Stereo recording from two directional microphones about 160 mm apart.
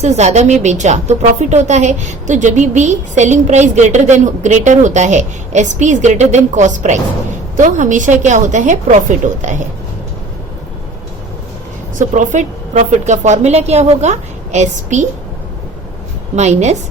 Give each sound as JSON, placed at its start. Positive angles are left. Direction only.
{"t": 0.0, "sound": "a woman's voice", "side_deg": -45}
{"t": 11.9, "sound": "a woman's voice", "side_deg": -50}
{"t": 16.3, "sound": "a woman's voice", "side_deg": -45}